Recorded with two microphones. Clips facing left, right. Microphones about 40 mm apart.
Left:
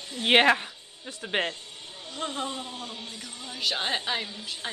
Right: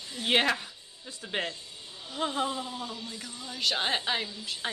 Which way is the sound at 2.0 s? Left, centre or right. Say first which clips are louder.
Right 2 dB; centre.